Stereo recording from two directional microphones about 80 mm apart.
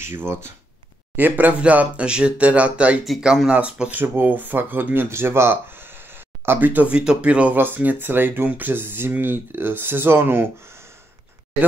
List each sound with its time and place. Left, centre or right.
0.0 s speech: right
1.1 s speech: right
3.1 s speech: centre
4.0 s speech: right